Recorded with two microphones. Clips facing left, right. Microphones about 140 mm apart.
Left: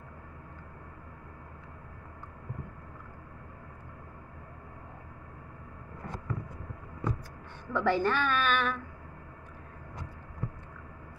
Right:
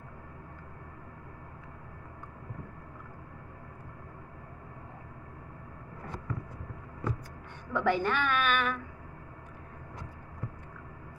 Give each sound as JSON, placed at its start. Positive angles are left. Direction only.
{"t": 7.7, "sound": "a woman's voice", "side_deg": -15}